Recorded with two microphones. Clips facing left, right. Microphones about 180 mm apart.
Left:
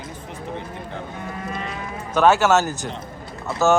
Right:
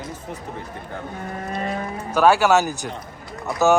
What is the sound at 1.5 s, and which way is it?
Cattle, 45° right (ahead or behind).